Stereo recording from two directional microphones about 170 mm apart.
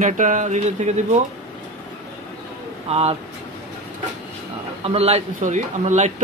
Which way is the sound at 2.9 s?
40° right (ahead or behind).